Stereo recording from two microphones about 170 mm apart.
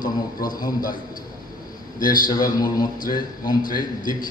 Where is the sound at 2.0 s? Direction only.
55° left (ahead or behind).